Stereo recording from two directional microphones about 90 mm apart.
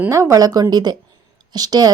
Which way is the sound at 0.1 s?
35° right (ahead or behind).